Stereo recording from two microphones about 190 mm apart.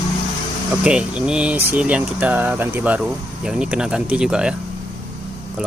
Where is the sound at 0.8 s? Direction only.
5° right (ahead or behind).